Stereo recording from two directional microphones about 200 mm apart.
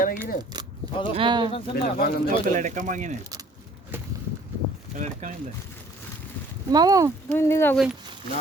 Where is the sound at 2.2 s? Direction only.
40° right (ahead or behind).